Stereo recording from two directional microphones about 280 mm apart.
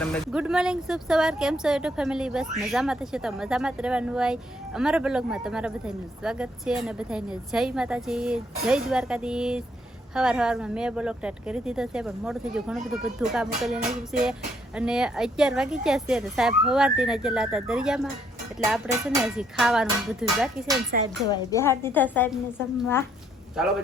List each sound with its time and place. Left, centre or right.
0.0 s speech: centre
20.9 s speech: right
21.5 s a woman's voice: centre
23.6 s speech: centre